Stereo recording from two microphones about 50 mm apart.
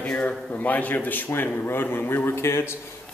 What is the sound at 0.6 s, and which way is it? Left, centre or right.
A man's voice, left.